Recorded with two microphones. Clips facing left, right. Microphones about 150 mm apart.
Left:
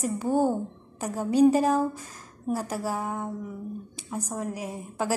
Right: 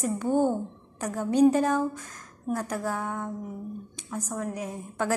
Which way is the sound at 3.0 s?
30° left (ahead or behind).